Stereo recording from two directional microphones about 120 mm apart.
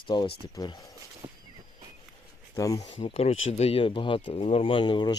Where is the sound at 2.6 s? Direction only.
30° left (ahead or behind).